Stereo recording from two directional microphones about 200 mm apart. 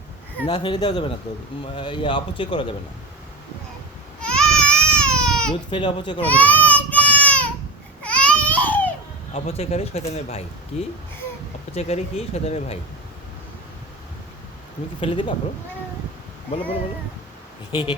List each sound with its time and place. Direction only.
0.4 s speech: 20° left (ahead or behind)
4.2 s baby cry: 5° left (ahead or behind)
5.7 s speech: 25° left (ahead or behind)
6.2 s child singing: 10° left (ahead or behind)
8.0 s baby cry: 5° left (ahead or behind)
9.3 s speech: 30° left (ahead or behind)
15.0 s speech: 25° left (ahead or behind)
17.7 s speech: 25° left (ahead or behind)